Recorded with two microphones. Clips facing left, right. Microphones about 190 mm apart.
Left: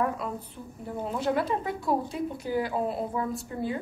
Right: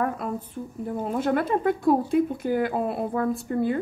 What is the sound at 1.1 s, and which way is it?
A woman's voice, 50° right (ahead or behind).